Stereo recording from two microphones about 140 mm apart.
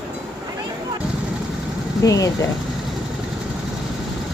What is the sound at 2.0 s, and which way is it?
Speech, 25° left (ahead or behind).